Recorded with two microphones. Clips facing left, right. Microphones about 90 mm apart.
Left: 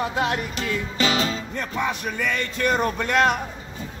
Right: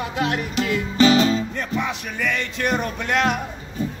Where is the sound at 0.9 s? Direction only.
30° right (ahead or behind).